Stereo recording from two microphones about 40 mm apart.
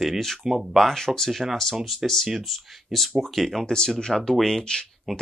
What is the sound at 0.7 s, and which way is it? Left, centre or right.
Speech, centre.